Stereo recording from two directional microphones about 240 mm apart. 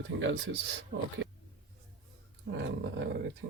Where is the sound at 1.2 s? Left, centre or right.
Right.